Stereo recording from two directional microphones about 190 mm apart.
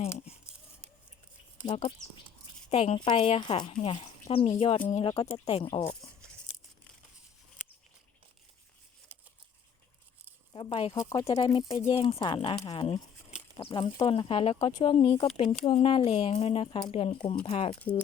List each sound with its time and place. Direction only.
1.6 s speech: 30° left (ahead or behind)
10.5 s speech: 25° left (ahead or behind)
10.9 s speech: 20° left (ahead or behind)